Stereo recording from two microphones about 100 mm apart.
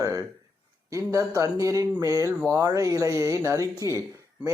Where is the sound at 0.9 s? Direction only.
35° right (ahead or behind).